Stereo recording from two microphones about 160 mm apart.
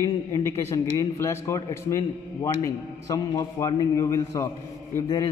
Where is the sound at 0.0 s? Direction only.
20° left (ahead or behind).